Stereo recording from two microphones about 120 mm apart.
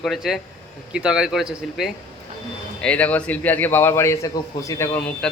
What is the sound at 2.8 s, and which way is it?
A man's voice, 10° left (ahead or behind).